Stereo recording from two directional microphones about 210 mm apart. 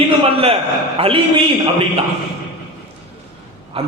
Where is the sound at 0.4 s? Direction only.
25° right (ahead or behind).